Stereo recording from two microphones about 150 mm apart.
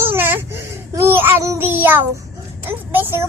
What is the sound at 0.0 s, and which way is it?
Babbling, 15° right (ahead or behind).